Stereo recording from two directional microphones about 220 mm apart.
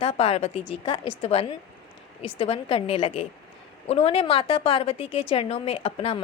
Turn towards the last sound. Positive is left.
turn(degrees=25)  # may be behind; listen again after turning